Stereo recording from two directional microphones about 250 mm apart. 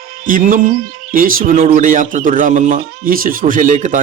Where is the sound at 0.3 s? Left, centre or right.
Right.